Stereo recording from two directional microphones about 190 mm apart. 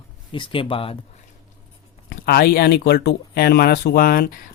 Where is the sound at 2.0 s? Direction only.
55° left (ahead or behind).